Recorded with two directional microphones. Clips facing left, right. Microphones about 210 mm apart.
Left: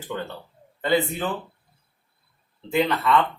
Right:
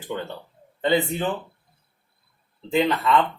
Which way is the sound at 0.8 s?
20° right (ahead or behind).